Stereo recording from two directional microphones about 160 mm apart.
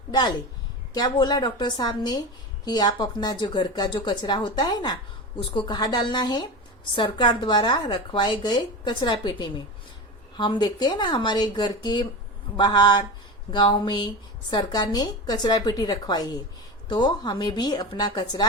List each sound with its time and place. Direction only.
0.1 s speech: 25° left (ahead or behind)